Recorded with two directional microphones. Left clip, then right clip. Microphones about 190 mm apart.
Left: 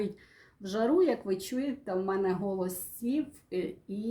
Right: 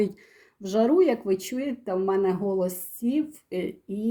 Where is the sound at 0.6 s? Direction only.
40° right (ahead or behind).